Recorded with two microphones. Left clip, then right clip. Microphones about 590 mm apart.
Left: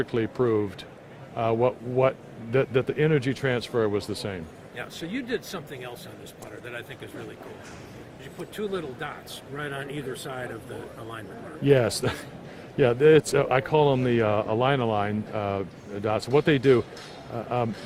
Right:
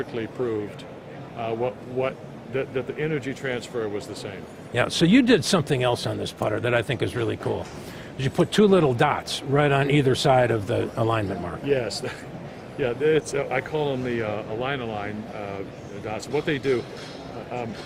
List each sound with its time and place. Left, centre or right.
0.0 s speech: left
4.7 s speech: right
8.2 s a man's voice: right
11.6 s speech: left